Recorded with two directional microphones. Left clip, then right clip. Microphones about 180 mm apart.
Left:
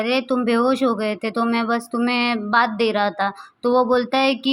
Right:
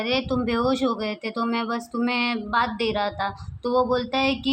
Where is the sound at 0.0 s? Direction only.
20° left (ahead or behind).